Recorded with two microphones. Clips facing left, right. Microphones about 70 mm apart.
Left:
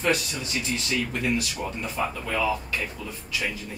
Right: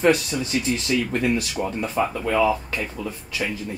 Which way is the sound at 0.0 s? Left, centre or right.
Right.